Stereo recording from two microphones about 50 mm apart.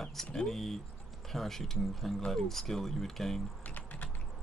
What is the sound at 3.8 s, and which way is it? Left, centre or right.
Typing, left.